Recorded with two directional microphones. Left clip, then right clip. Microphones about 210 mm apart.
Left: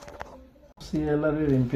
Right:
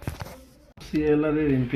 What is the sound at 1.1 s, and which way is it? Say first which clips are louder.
Speech: right 2 dB; 35° left (ahead or behind).